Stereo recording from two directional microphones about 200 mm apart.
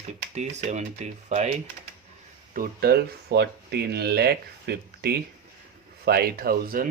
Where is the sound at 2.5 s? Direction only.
50° right (ahead or behind).